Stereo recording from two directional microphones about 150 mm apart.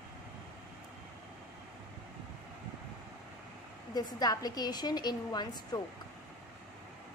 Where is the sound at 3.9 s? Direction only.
25° left (ahead or behind).